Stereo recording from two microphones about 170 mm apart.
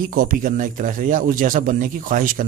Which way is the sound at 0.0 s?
55° right (ahead or behind).